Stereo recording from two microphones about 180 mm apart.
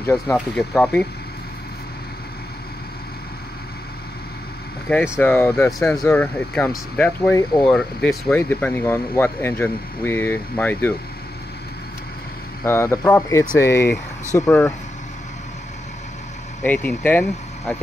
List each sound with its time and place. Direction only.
0.0 s speech: 15° left (ahead or behind)
4.9 s speech: 10° left (ahead or behind)
12.6 s speech: 15° left (ahead or behind)
16.6 s speech: 10° left (ahead or behind)